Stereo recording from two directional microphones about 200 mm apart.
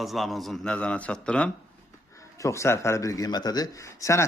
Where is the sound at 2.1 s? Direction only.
15° left (ahead or behind).